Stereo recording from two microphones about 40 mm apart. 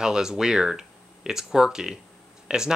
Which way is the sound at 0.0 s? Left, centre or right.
Centre.